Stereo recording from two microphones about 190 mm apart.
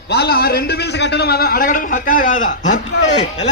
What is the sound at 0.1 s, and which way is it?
A man's voice, 55° left (ahead or behind).